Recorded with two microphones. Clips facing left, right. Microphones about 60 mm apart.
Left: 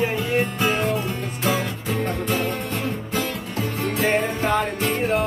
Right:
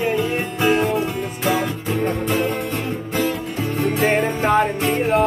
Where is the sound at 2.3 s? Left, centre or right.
Centre.